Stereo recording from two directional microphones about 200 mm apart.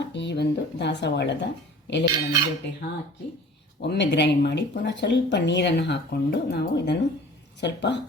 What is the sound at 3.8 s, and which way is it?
A woman's voice, 60° left (ahead or behind).